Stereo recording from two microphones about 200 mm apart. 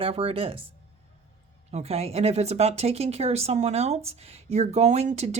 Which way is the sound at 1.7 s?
30° right (ahead or behind).